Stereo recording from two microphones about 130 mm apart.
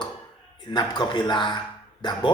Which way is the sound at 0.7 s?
35° left (ahead or behind).